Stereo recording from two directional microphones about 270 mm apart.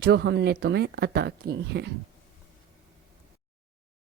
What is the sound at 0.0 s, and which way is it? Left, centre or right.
Speech, right.